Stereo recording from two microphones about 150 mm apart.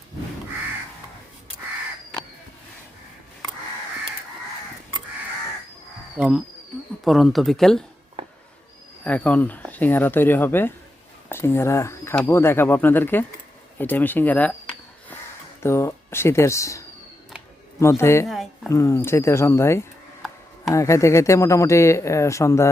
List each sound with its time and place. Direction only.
6.1 s speech: 5° right (ahead or behind)
8.2 s a sound: 40° right (ahead or behind)
9.0 s speech: 10° left (ahead or behind)
15.6 s speech: 15° left (ahead or behind)
18.3 s a woman's voice: centre (ahead or behind)
18.7 s speech: 20° left (ahead or behind)